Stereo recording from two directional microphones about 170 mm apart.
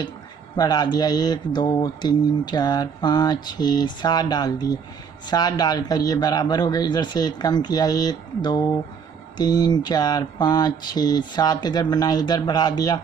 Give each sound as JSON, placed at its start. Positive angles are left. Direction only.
{"t": 0.6, "sound": "speech", "side_deg": 25}